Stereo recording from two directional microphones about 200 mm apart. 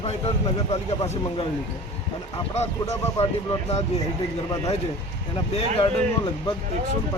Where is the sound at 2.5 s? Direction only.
35° left (ahead or behind).